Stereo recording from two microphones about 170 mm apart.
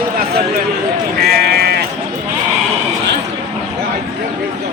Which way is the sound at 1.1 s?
70° right (ahead or behind).